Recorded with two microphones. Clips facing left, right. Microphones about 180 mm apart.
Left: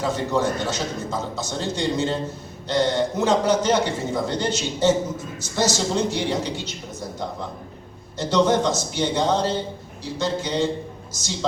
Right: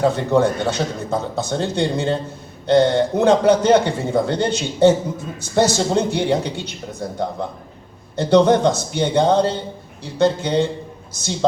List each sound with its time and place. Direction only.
0.0 s a man's voice: 60° right (ahead or behind)
8.1 s a man's voice: 60° right (ahead or behind)